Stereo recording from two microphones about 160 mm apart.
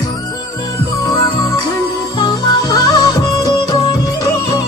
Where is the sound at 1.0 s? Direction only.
25° left (ahead or behind).